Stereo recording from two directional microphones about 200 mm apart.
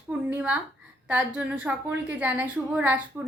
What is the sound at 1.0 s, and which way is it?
A woman's voice, 5° right (ahead or behind).